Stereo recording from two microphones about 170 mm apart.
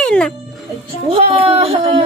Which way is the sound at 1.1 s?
35° right (ahead or behind).